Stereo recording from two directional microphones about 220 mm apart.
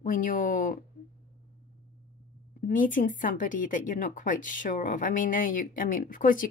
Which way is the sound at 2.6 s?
35° left (ahead or behind).